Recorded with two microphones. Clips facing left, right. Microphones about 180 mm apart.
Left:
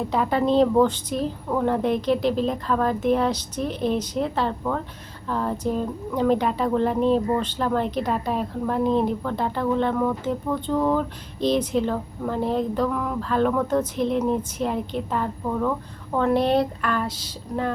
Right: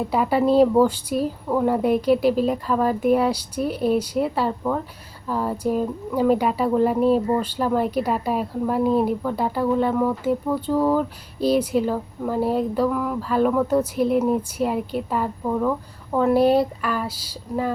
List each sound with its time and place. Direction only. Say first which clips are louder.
0.0 s speech: right 2 dB; 10° right (ahead or behind)